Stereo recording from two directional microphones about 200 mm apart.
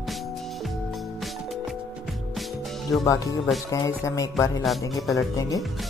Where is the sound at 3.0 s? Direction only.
15° left (ahead or behind).